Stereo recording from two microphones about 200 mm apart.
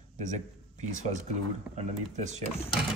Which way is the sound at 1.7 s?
35° right (ahead or behind).